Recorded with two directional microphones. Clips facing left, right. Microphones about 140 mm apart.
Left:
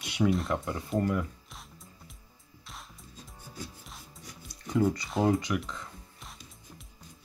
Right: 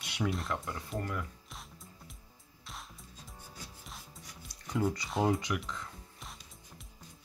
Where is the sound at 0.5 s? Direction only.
15° left (ahead or behind).